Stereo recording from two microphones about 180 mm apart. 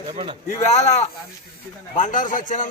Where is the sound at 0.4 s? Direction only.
40° left (ahead or behind).